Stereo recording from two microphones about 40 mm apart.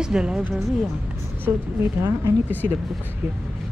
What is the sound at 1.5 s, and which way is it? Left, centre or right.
Speech, right.